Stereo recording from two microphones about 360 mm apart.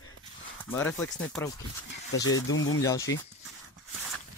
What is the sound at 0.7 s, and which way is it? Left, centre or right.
Speech, centre.